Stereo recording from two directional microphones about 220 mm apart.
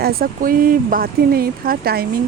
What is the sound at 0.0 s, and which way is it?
Speech, 45° right (ahead or behind).